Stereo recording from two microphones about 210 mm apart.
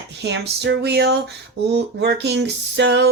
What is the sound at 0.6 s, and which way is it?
Speech, 50° right (ahead or behind).